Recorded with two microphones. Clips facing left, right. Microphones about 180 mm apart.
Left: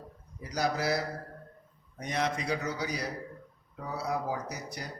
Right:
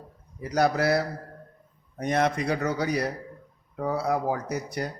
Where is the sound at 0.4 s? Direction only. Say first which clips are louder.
Right 7 dB; 60° right (ahead or behind).